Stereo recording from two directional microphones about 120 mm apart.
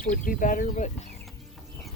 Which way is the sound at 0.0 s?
90° left.